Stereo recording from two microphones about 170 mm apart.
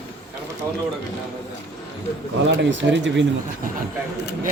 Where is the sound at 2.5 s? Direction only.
90° right.